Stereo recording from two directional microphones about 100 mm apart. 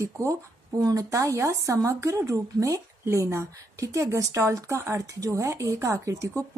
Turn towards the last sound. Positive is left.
turn(degrees=-30)  # may be behind; listen again after turning